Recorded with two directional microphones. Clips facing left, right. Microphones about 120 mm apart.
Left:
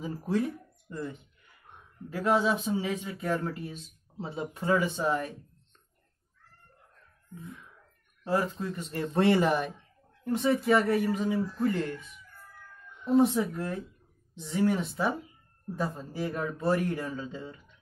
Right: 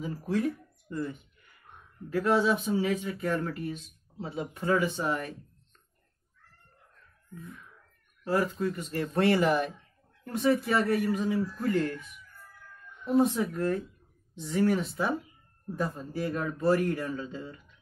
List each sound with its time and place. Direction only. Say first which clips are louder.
0.0 s speech: even; 25° left (ahead or behind)
8.2 s speech: right 1 dB; 25° left (ahead or behind)
16.2 s speech: right 1 dB; 25° left (ahead or behind)